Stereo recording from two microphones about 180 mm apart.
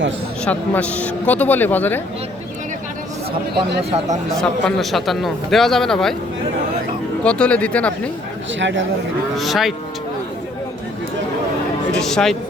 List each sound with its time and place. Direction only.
0.4 s a man's voice: 5° left (ahead or behind)
4.4 s a man's voice: centre (ahead or behind)
7.3 s a man's voice: 5° left (ahead or behind)
8.5 s speech: 90° right
9.4 s a man's voice: centre (ahead or behind)
11.9 s a man's voice: centre (ahead or behind)